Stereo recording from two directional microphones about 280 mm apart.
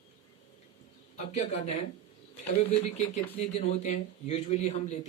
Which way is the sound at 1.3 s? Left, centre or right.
Left.